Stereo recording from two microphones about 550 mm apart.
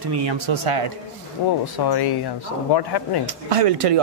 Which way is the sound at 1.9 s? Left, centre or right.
Left.